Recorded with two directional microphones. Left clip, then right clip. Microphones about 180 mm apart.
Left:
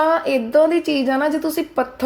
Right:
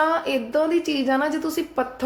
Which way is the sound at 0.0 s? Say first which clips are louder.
Left 4 dB; 25° left (ahead or behind).